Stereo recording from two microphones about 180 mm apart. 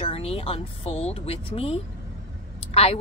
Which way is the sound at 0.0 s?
30° left (ahead or behind).